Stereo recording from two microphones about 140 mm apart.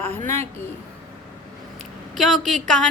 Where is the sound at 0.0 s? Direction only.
15° left (ahead or behind).